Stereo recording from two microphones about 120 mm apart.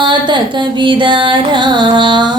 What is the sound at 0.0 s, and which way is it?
Music, 40° right (ahead or behind).